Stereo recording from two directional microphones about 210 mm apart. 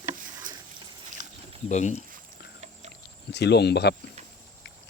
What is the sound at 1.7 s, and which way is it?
Speech, 35° left (ahead or behind).